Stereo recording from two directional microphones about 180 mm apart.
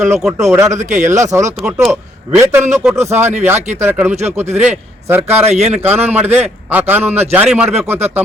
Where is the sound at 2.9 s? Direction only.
40° right (ahead or behind).